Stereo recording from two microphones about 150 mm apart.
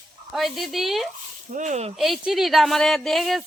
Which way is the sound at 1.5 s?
50° right (ahead or behind).